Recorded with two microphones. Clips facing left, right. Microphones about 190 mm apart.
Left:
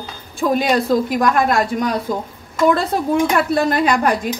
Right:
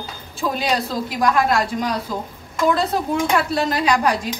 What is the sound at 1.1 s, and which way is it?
Speech, 50° left (ahead or behind).